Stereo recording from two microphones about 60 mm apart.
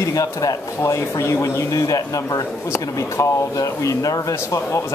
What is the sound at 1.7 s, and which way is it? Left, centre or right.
Speech, left.